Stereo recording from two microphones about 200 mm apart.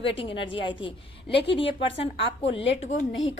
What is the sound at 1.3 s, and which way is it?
Speech, 60° left (ahead or behind).